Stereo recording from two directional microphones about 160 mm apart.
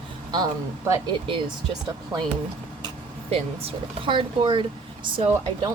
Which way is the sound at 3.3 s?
40° right (ahead or behind).